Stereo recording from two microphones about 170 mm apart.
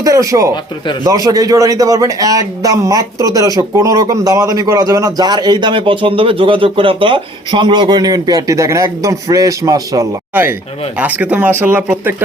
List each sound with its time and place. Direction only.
0.0 s a man's voice: 20° right (ahead or behind)